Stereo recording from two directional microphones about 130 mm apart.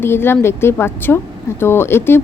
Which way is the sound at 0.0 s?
20° left (ahead or behind).